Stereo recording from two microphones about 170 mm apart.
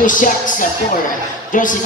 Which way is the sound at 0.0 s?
50° left (ahead or behind).